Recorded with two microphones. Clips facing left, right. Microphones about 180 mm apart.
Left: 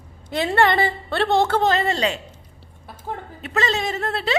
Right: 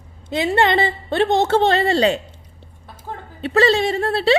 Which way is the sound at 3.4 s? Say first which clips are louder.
Right 8 dB; 35° right (ahead or behind).